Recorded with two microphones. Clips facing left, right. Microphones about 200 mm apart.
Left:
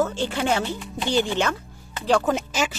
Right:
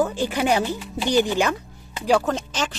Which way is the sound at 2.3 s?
10° left (ahead or behind).